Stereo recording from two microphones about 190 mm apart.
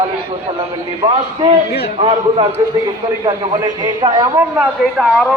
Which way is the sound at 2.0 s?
25° right (ahead or behind).